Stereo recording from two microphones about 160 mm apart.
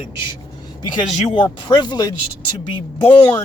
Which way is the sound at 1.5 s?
30° left (ahead or behind).